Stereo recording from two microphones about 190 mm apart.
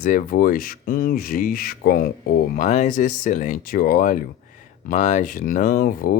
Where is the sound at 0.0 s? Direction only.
45° left (ahead or behind).